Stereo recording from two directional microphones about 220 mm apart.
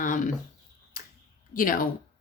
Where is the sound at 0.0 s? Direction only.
35° left (ahead or behind).